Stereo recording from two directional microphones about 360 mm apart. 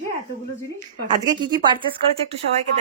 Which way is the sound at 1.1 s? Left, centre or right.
Centre.